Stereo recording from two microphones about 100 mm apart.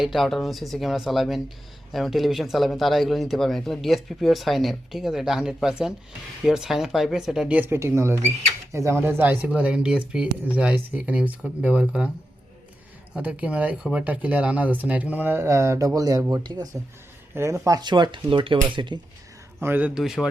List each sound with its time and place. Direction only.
0.0 s speech: centre (ahead or behind)
13.1 s speech: 15° right (ahead or behind); by 16.2 s 35° right (ahead or behind)
16.3 s speech: 45° right (ahead or behind)
17.3 s speech: 25° right (ahead or behind)
17.7 s speech: 50° right (ahead or behind)
19.6 s speech: 20° right (ahead or behind)
19.9 s speech: 5° right (ahead or behind)